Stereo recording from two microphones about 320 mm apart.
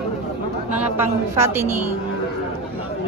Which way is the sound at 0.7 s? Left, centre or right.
Centre.